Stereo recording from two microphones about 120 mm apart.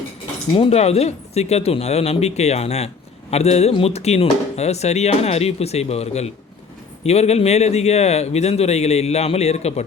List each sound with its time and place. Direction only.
0.5 s speech: 55° left (ahead or behind)